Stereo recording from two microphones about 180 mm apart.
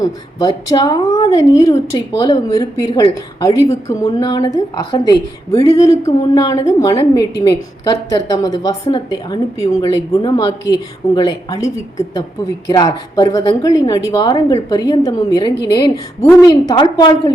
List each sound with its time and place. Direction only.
0.0 s a woman's voice: 20° left (ahead or behind)